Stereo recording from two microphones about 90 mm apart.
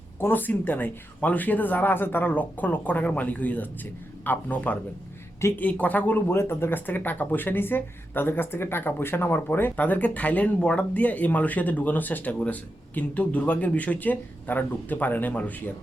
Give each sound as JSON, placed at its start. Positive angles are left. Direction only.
{"t": 0.2, "sound": "speech", "side_deg": 20}
{"t": 5.4, "sound": "a woman's voice", "side_deg": 30}
{"t": 5.6, "sound": "speech", "side_deg": 15}